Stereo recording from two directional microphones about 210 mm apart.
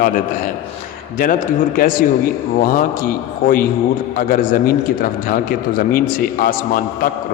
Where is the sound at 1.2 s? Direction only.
40° left (ahead or behind).